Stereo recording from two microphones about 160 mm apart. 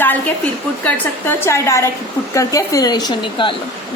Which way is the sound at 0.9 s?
10° left (ahead or behind).